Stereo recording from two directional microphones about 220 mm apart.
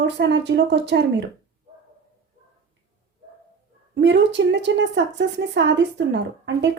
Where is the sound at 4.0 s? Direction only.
55° right (ahead or behind).